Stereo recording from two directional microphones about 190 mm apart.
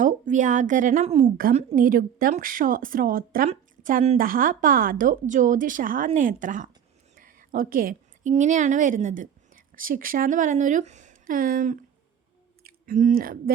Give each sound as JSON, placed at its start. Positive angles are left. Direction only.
{"t": 0.0, "sound": "a woman's voice", "side_deg": -40}